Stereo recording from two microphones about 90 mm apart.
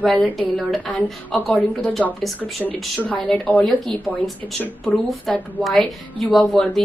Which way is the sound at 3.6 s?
Centre (ahead or behind).